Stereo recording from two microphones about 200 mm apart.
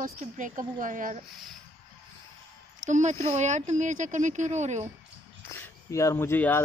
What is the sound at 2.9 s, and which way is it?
Speech, 35° right (ahead or behind).